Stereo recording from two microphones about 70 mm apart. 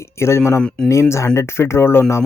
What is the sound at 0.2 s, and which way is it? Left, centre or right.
Speech, left.